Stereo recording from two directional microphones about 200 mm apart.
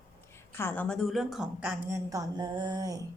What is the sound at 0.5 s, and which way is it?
A woman's voice, 10° left (ahead or behind).